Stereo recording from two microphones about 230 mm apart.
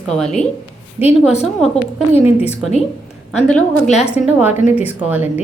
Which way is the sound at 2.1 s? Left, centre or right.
Left.